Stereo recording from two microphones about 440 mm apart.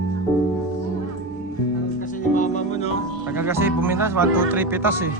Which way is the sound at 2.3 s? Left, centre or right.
Centre.